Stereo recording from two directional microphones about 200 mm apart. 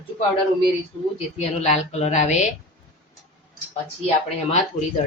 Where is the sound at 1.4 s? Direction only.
30° left (ahead or behind).